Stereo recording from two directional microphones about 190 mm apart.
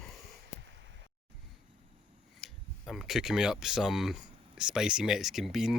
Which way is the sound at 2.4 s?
Centre (ahead or behind).